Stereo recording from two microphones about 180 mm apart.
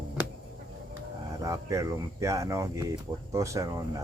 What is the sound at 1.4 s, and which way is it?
Speech, 20° right (ahead or behind).